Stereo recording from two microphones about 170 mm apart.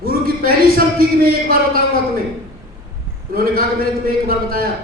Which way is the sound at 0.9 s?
60° right (ahead or behind).